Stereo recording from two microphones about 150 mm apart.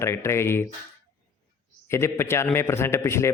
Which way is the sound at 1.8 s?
15° left (ahead or behind).